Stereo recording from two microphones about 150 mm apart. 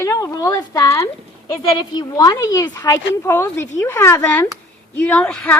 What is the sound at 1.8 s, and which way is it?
A woman's voice, 30° left (ahead or behind).